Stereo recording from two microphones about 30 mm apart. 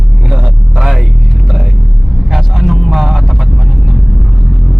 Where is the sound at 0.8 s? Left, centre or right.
Centre.